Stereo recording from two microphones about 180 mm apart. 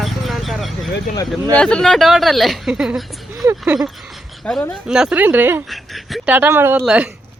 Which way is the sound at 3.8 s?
Centre (ahead or behind).